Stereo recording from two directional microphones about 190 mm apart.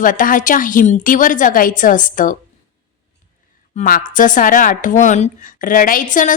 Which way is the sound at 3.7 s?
50° left (ahead or behind).